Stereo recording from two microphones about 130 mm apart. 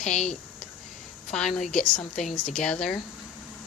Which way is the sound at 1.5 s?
70° left (ahead or behind).